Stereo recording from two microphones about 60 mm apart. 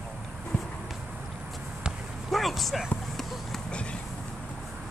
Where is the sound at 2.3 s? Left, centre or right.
Centre.